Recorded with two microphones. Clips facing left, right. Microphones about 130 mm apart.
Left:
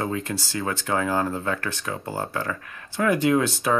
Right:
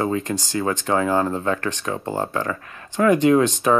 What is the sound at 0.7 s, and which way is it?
Speech, 20° right (ahead or behind).